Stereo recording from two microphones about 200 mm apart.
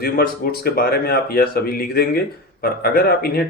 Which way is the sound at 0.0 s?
50° left (ahead or behind).